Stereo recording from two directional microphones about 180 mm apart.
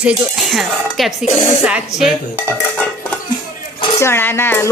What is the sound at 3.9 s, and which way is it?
Speech, 15° left (ahead or behind).